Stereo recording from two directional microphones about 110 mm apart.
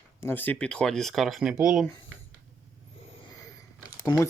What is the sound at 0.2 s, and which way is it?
Speech, 20° left (ahead or behind).